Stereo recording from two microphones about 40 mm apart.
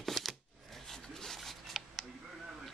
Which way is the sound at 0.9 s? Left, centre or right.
Centre.